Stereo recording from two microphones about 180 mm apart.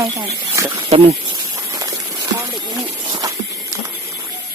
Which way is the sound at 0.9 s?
35° right (ahead or behind).